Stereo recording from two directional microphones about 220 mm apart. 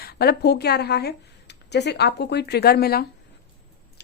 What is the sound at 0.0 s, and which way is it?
A woman's voice, 45° left (ahead or behind).